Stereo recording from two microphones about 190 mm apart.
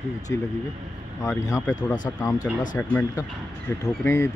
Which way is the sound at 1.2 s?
15° left (ahead or behind).